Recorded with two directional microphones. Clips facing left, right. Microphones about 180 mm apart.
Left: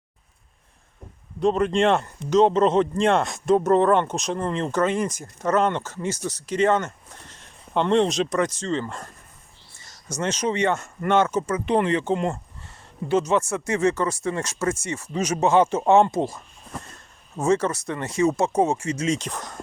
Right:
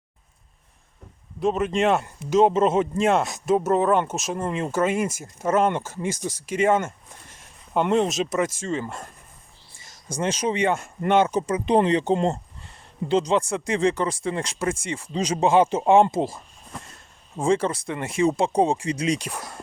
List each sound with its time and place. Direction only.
1.4 s speech: 5° right (ahead or behind); by 12.0 s 20° right (ahead or behind)
12.0 s speech: 30° right (ahead or behind); by 16.4 s 10° right (ahead or behind)
17.5 s speech: 10° right (ahead or behind)